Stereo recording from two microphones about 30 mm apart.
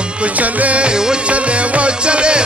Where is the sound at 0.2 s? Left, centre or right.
Right.